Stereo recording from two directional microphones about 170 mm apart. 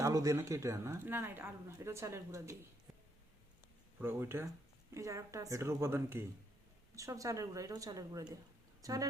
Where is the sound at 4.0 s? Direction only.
15° right (ahead or behind).